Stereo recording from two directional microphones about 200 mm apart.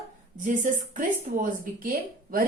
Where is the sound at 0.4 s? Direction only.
40° right (ahead or behind).